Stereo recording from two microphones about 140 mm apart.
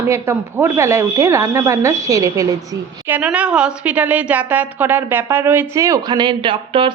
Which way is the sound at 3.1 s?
10° right (ahead or behind).